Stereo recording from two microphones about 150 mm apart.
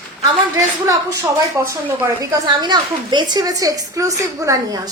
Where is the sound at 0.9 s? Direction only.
20° right (ahead or behind).